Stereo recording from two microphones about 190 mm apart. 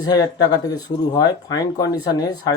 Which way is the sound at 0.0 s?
20° left (ahead or behind).